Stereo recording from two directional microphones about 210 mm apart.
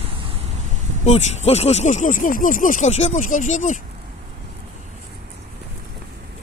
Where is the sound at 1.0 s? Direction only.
30° left (ahead or behind).